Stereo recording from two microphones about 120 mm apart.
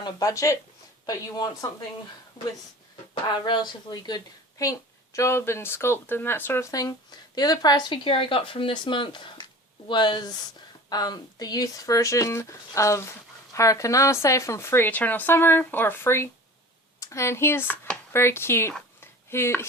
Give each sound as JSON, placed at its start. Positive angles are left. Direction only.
{"t": 0.0, "sound": "speech", "side_deg": 30}
{"t": 3.4, "sound": "speech", "side_deg": 40}
{"t": 18.9, "sound": "a sound", "side_deg": 20}